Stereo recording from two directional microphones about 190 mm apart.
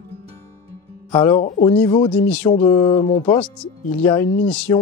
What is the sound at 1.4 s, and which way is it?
Speech, 40° left (ahead or behind).